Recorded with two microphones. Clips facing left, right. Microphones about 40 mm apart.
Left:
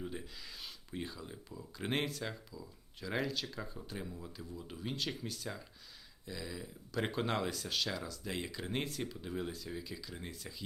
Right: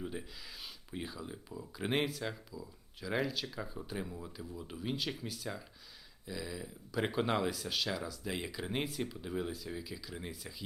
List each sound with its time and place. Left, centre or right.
0.0 s speech: centre